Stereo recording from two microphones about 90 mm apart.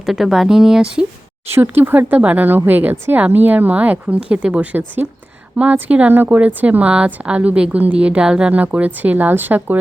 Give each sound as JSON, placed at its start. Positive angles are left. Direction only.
{"t": 0.0, "sound": "speech", "side_deg": 0}
{"t": 1.5, "sound": "a woman's voice", "side_deg": -25}